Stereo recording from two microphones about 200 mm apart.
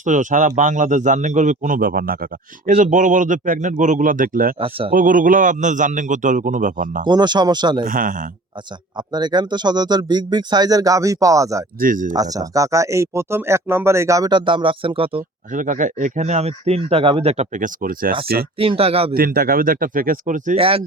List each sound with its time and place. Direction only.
0.0 s a man's voice: 40° right (ahead or behind)
7.0 s speech: 20° right (ahead or behind)
7.9 s speech: 45° right (ahead or behind)
9.0 s speech: 20° right (ahead or behind)
11.8 s speech: 45° right (ahead or behind)
12.1 s speech: 20° right (ahead or behind)
15.5 s a man's voice: 40° right (ahead or behind)
18.5 s speech: 25° right (ahead or behind)
19.1 s speech: 50° right (ahead or behind)